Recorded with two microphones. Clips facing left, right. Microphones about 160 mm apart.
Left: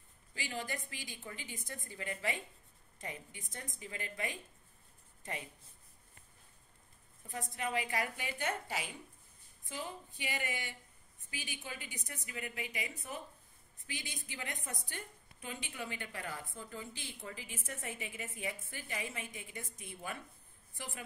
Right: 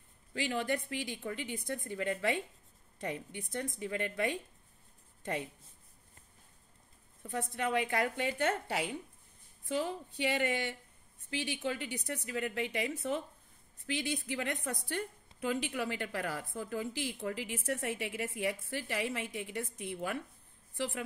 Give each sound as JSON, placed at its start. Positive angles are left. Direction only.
{"t": 0.3, "sound": "a woman's voice", "side_deg": -65}
{"t": 7.3, "sound": "a woman's voice", "side_deg": -70}
{"t": 15.4, "sound": "a woman's voice", "side_deg": -80}